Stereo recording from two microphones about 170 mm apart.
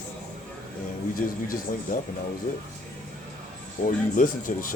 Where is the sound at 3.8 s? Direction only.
50° left (ahead or behind).